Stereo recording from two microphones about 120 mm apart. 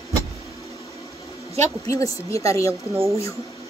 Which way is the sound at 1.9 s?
25° left (ahead or behind).